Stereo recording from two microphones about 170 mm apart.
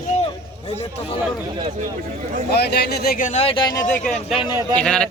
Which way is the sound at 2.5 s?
75° left (ahead or behind).